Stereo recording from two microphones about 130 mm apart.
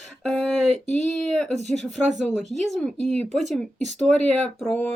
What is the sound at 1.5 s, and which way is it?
Speech, 60° right (ahead or behind).